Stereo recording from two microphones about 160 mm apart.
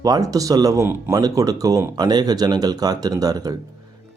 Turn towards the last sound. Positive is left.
turn(degrees=-25)  # may be behind; listen again after turning